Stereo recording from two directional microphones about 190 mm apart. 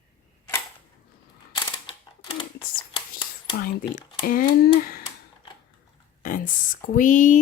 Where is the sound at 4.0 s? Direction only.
45° left (ahead or behind).